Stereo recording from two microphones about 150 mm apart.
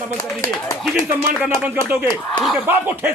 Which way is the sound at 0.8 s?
Centre (ahead or behind).